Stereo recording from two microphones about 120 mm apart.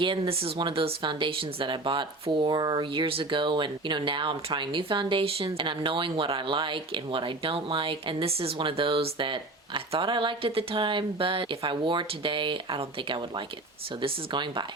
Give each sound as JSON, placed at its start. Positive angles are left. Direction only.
{"t": 0.0, "sound": "speech", "side_deg": -50}